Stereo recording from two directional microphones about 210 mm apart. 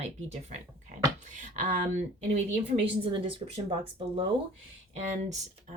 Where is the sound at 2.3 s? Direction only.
30° right (ahead or behind).